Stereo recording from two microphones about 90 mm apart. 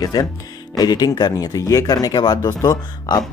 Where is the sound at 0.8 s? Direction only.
45° left (ahead or behind).